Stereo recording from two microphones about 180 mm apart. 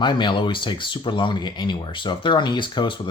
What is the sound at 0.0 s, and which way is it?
Speech, 25° left (ahead or behind).